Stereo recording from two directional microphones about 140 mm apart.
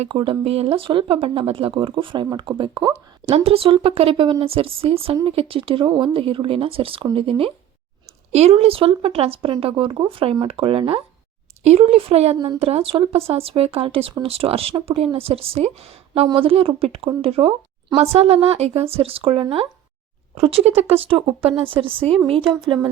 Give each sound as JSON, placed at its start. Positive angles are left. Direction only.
{"t": 0.1, "sound": "speech", "side_deg": -40}